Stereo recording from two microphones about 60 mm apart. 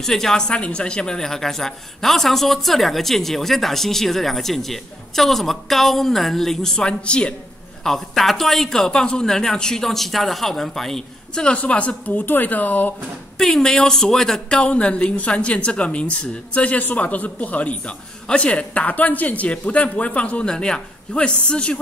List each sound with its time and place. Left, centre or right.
0.0 s speech: centre
7.8 s a woman's voice: centre
11.4 s a woman's voice: left
13.4 s a woman's voice: centre
14.6 s a woman's voice: centre